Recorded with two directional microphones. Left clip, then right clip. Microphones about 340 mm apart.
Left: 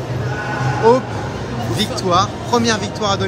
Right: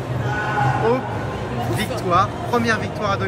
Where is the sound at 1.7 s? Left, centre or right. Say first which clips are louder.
Left 3 dB; centre.